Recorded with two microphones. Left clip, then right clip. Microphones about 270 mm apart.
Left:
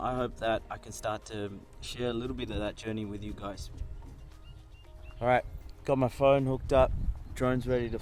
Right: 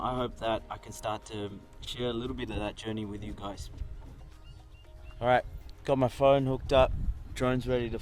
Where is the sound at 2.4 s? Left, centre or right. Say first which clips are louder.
Even; centre.